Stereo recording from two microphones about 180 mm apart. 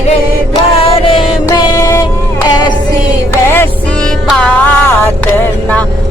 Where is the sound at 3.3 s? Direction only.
15° left (ahead or behind).